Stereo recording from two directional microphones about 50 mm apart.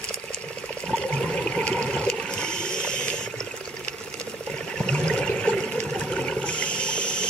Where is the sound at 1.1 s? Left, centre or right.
Centre.